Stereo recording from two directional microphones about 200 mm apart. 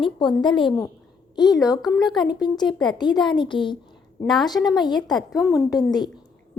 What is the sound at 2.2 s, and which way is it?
A woman's voice, 20° left (ahead or behind).